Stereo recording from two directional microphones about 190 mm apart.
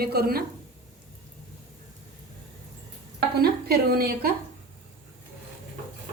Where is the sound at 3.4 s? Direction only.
55° right (ahead or behind).